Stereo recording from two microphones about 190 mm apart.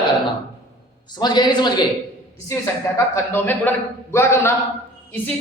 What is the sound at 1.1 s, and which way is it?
A woman's voice, 20° left (ahead or behind).